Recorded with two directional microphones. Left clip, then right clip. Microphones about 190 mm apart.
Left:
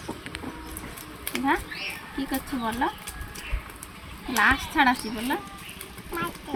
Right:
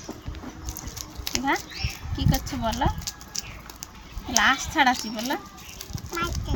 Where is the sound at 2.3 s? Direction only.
30° right (ahead or behind).